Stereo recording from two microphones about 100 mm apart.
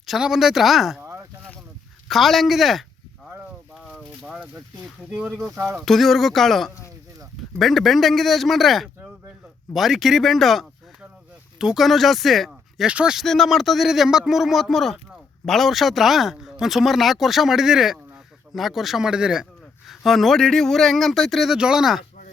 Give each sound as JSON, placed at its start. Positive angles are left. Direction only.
{"t": 0.0, "sound": "speech", "side_deg": -5}
{"t": 1.0, "sound": "a sound", "side_deg": -30}
{"t": 2.0, "sound": "speech", "side_deg": 0}
{"t": 3.8, "sound": "a sound", "side_deg": 0}
{"t": 5.1, "sound": "speech", "side_deg": -10}
{"t": 5.8, "sound": "speech", "side_deg": 0}
{"t": 13.2, "sound": "speech", "side_deg": 5}